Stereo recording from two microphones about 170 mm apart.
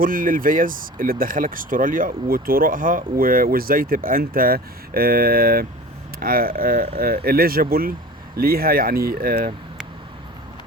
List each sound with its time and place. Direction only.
0.0 s speech: 55° right (ahead or behind)